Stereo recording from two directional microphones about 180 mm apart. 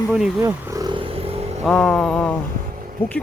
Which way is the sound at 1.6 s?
5° left (ahead or behind).